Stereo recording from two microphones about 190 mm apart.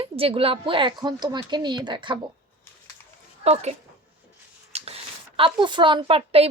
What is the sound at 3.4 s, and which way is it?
Speech, 35° right (ahead or behind).